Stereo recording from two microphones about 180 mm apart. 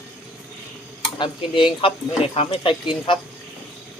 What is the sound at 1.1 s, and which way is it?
Speech, 25° left (ahead or behind).